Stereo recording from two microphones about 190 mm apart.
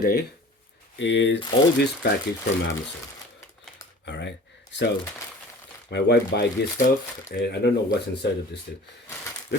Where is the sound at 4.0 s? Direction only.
65° left (ahead or behind).